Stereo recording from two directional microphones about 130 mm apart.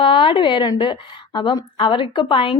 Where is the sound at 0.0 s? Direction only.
40° left (ahead or behind).